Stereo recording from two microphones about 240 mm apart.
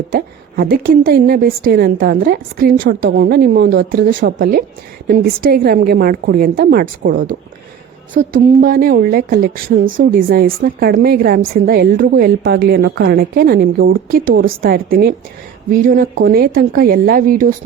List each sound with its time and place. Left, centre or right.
0.1 s a woman's voice: right